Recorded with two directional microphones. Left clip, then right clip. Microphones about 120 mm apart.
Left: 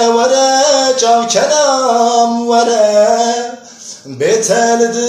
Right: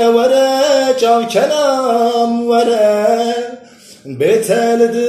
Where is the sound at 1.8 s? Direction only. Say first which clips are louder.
Left 3 dB; 25° left (ahead or behind).